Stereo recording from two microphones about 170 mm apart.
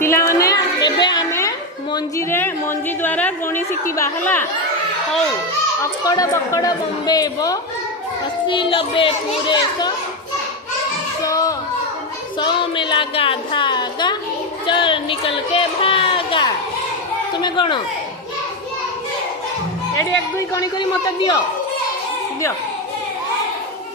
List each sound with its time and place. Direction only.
0.0 s a sound: 15° left (ahead or behind)
1.3 s speech: 20° left (ahead or behind)
5.8 s speech: 20° left (ahead or behind)
11.2 s children playing: 20° left (ahead or behind)
12.4 s a woman's voice: 30° left (ahead or behind)
14.7 s a sound: 30° left (ahead or behind)
17.3 s speech: 30° left (ahead or behind)
20.5 s speech: 20° left (ahead or behind)